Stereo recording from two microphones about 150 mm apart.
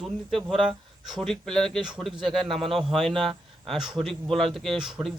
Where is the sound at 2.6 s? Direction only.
40° right (ahead or behind).